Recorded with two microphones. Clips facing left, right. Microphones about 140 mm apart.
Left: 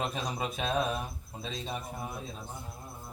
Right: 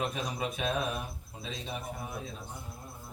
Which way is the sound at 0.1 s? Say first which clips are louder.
Even; 30° left (ahead or behind).